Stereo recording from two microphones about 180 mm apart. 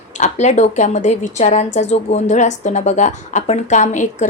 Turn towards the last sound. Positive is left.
turn(degrees=40)  # may be behind; listen again after turning